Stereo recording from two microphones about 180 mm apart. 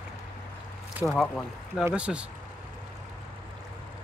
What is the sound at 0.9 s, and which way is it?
Speech, centre (ahead or behind).